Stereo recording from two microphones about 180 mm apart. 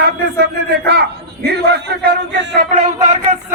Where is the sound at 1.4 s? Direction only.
65° right (ahead or behind).